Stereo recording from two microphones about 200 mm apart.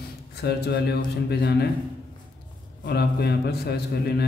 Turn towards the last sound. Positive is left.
turn(degrees=55)  # may be behind; listen again after turning